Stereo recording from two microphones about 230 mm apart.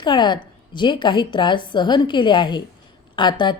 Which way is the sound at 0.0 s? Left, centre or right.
Centre.